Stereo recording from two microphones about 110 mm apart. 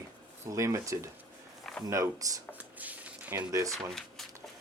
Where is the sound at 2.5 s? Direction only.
15° right (ahead or behind).